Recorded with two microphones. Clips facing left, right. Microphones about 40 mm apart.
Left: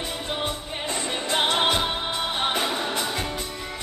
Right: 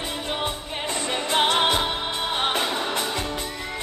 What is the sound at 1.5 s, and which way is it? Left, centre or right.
Music, centre.